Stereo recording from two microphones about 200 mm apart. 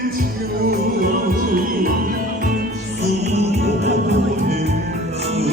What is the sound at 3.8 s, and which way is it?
Music, 55° right (ahead or behind).